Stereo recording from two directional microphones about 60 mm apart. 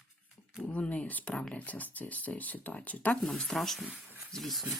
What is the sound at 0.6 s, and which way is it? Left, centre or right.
Speech, centre.